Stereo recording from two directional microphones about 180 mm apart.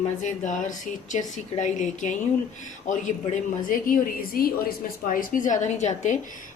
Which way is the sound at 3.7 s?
55° left (ahead or behind).